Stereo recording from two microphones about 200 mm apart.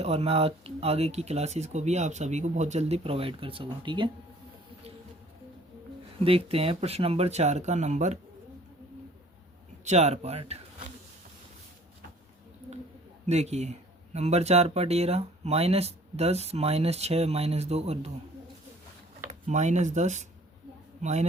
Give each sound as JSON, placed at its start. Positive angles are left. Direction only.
{"t": 0.0, "sound": "speech", "side_deg": -30}
{"t": 6.2, "sound": "speech", "side_deg": -30}
{"t": 9.8, "sound": "speech", "side_deg": -35}
{"t": 13.2, "sound": "speech", "side_deg": -35}
{"t": 19.3, "sound": "speech", "side_deg": -35}